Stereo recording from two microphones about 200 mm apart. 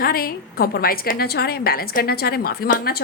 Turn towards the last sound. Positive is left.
turn(degrees=50)  # may be behind; listen again after turning